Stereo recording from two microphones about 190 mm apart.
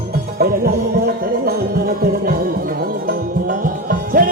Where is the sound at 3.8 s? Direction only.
45° right (ahead or behind).